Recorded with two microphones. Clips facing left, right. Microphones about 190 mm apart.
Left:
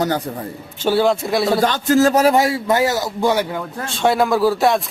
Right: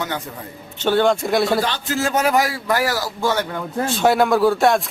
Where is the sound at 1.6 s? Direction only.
45° left (ahead or behind); by 3.5 s 15° left (ahead or behind).